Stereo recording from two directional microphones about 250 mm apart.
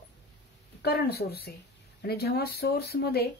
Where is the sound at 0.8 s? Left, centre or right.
Left.